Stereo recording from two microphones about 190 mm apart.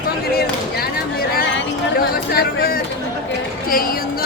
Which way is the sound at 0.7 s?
55° left (ahead or behind).